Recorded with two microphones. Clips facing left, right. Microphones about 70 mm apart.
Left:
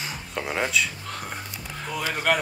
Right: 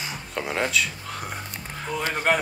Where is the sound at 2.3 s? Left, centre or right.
Right.